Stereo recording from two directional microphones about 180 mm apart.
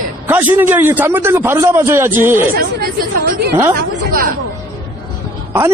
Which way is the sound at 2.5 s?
55° right (ahead or behind).